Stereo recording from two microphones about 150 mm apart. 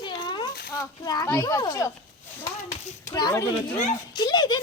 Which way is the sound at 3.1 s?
25° left (ahead or behind).